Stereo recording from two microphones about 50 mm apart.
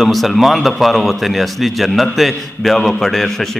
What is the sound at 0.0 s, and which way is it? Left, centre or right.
A man's voice, centre.